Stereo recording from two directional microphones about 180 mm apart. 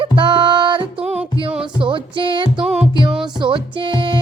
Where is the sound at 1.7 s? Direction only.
25° right (ahead or behind).